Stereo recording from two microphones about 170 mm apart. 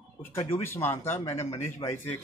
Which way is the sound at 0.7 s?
15° left (ahead or behind).